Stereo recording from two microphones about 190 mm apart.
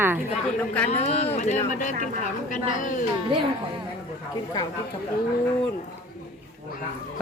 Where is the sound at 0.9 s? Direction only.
35° left (ahead or behind).